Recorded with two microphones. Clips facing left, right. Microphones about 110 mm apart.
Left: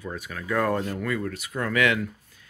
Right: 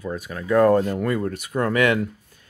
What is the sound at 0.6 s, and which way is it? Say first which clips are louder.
Speech: right 8 dB; 40° right (ahead or behind).